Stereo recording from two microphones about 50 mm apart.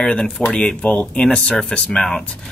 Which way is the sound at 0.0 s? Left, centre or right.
Centre.